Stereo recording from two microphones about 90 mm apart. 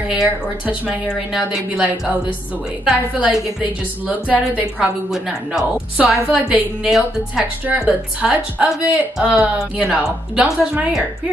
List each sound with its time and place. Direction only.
0.2 s a woman's voice: 10° right (ahead or behind)